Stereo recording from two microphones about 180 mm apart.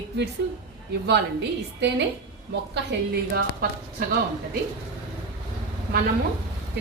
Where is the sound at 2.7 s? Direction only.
65° right (ahead or behind).